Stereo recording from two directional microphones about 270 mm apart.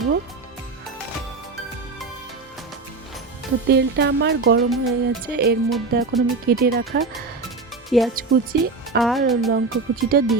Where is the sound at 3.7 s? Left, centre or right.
Right.